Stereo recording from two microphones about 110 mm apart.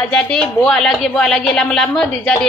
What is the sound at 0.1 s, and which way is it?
A woman's voice, 5° left (ahead or behind).